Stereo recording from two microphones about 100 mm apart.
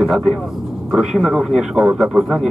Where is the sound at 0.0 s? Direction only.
Centre (ahead or behind).